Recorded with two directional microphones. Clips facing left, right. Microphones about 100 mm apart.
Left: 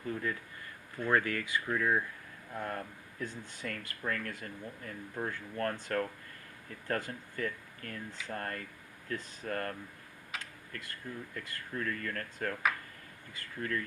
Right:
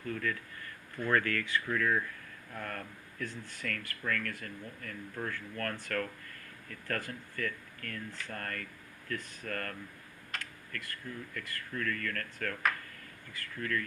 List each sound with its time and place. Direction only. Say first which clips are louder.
0.0 s speech: even; 25° left (ahead or behind)
10.4 s a sound: right 2 dB; 25° left (ahead or behind)
11.3 s speech: right 1 dB; 25° left (ahead or behind)